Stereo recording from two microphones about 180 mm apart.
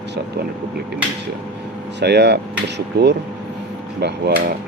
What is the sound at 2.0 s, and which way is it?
Speech, 70° right (ahead or behind).